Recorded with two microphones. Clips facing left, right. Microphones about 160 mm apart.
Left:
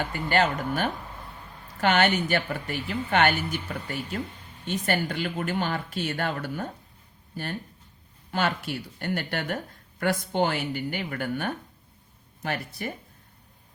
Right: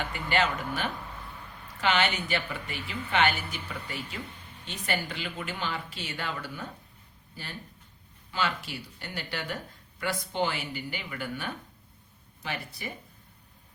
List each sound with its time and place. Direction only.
0.0 s a woman's voice: 45° left (ahead or behind)